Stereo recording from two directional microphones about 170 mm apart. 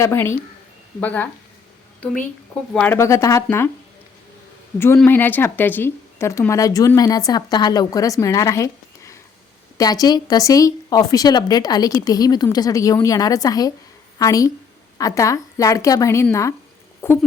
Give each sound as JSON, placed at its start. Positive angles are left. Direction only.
{"t": 0.0, "sound": "a woman's voice", "side_deg": 15}
{"t": 5.0, "sound": "speech", "side_deg": 10}